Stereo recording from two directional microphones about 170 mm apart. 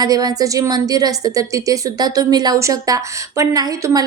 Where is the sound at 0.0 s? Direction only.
20° right (ahead or behind).